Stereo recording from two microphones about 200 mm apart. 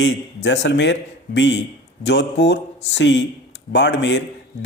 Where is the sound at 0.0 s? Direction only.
60° left (ahead or behind).